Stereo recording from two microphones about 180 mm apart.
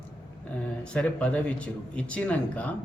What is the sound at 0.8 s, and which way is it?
A man's voice, 5° left (ahead or behind).